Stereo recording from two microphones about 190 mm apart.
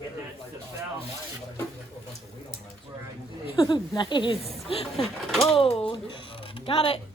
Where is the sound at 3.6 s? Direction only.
20° left (ahead or behind).